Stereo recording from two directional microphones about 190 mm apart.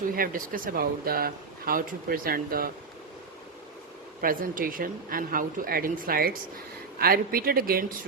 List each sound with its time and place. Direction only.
0.1 s speech: 50° right (ahead or behind)
4.2 s speech: 50° right (ahead or behind)